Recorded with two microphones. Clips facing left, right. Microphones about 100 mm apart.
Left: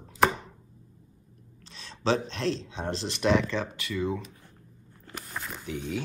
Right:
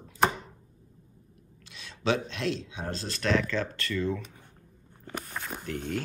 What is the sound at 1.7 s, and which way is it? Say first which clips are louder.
Speech: left 1 dB; 35° left (ahead or behind).